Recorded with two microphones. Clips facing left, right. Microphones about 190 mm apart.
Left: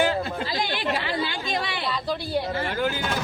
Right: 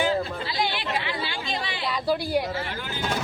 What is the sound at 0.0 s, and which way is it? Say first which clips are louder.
Chatter: left 1 dB; 45° left (ahead or behind).